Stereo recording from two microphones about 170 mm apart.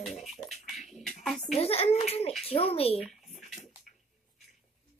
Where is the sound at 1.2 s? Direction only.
Centre (ahead or behind).